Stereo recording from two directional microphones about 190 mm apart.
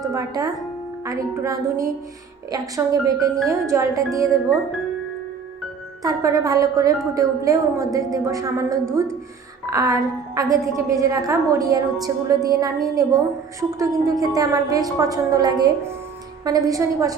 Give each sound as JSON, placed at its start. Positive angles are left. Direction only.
{"t": 0.1, "sound": "a woman's voice", "side_deg": -20}
{"t": 6.0, "sound": "a woman's voice", "side_deg": -20}